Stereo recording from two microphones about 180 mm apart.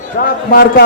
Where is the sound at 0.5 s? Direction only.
60° left (ahead or behind).